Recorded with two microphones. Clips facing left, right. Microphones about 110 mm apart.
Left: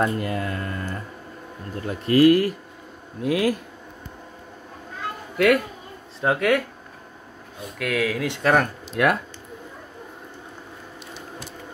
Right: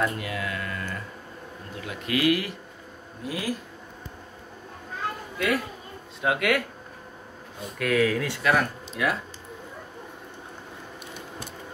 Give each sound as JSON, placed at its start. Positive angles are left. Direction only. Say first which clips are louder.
{"t": 0.0, "sound": "speech", "louder": "left 4 dB", "side_deg": 45}
{"t": 3.2, "sound": "speech", "louder": "left 9 dB", "side_deg": 65}
{"t": 6.2, "sound": "speech", "louder": "left 4 dB", "side_deg": 30}
{"t": 7.8, "sound": "speech", "louder": "right 1 dB", "side_deg": 5}
{"t": 8.4, "sound": "speech", "louder": "left 5 dB", "side_deg": 40}
{"t": 8.9, "sound": "speech", "louder": "left 7 dB", "side_deg": 60}